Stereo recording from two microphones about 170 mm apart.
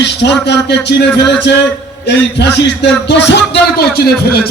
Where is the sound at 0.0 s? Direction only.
90° left.